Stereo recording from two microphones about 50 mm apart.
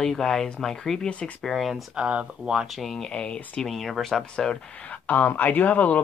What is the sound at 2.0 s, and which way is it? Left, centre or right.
Speech, centre.